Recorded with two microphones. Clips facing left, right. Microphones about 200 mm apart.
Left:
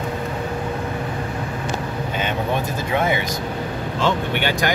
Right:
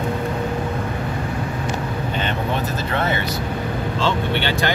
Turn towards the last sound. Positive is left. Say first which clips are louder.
# even
turn(degrees=10)  # may be behind; listen again after turning